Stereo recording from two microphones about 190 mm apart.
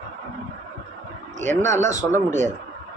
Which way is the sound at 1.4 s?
40° right (ahead or behind).